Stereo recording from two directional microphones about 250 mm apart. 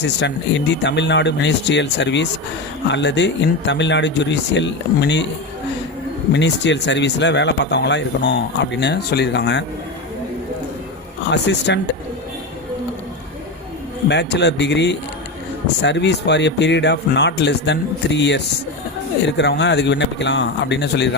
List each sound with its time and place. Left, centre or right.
0.0 s speech: left
6.3 s speech: left
11.3 s speech: left
14.1 s speech: left